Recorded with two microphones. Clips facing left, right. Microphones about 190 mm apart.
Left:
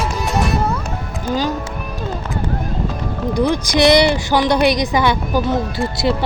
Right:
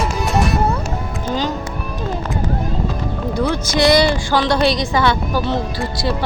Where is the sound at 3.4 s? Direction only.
15° left (ahead or behind).